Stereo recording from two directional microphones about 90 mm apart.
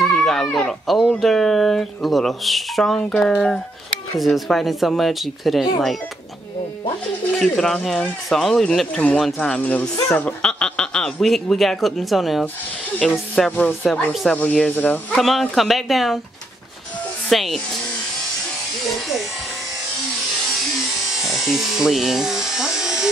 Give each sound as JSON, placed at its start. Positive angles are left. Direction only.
{"t": 0.0, "sound": "a sound", "side_deg": 5}
{"t": 0.6, "sound": "speech", "side_deg": 5}
{"t": 7.3, "sound": "speech", "side_deg": 5}
{"t": 13.5, "sound": "music", "side_deg": 20}
{"t": 14.3, "sound": "speech", "side_deg": 15}
{"t": 15.5, "sound": "speech", "side_deg": 0}
{"t": 17.3, "sound": "speech", "side_deg": 0}
{"t": 21.2, "sound": "electric shaver", "side_deg": -5}